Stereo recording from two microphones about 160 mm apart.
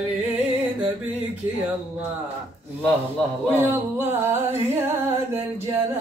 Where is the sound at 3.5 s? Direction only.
15° right (ahead or behind).